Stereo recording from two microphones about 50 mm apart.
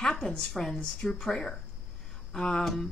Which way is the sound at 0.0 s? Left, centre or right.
Centre.